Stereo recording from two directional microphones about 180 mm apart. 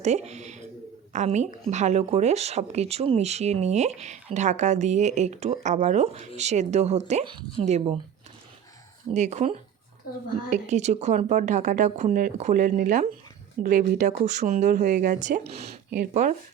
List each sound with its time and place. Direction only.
0.0 s speech: 40° right (ahead or behind)
9.1 s speech: 40° right (ahead or behind)